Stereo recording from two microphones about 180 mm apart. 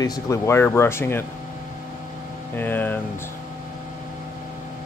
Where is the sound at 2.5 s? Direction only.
10° left (ahead or behind).